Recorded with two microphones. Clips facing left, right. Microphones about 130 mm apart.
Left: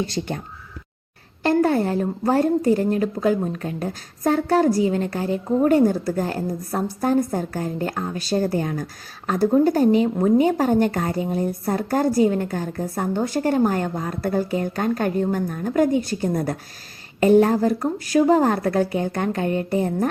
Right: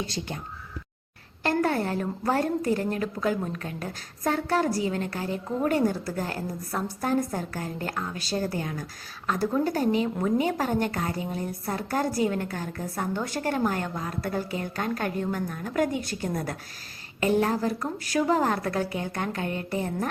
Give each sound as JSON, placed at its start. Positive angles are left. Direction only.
{"t": 1.5, "sound": "a woman's voice", "side_deg": 30}
{"t": 8.2, "sound": "a woman's voice", "side_deg": 50}